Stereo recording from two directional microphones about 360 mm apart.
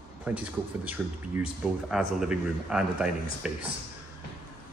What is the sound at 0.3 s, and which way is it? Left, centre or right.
Speech, centre.